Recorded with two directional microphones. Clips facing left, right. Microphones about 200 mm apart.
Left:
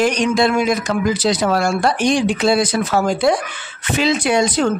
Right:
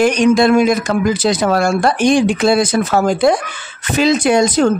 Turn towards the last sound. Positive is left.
turn(degrees=-45)  # may be behind; listen again after turning